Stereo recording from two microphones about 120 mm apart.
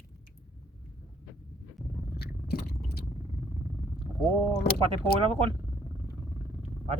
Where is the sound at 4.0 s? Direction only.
45° right (ahead or behind).